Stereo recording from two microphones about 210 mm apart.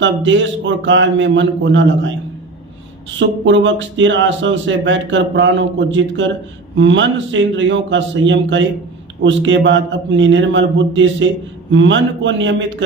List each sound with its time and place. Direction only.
0.0 s speech: 60° right (ahead or behind)
3.2 s speech: 60° right (ahead or behind)